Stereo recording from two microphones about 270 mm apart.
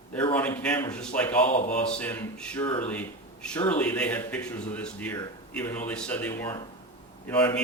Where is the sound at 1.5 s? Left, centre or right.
Left.